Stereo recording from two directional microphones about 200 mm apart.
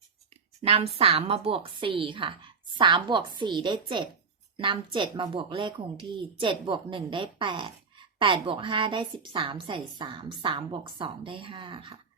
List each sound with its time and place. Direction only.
0.6 s a woman's voice: 30° right (ahead or behind)